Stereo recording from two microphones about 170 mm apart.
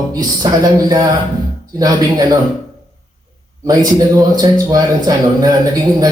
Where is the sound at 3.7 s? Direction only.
20° right (ahead or behind).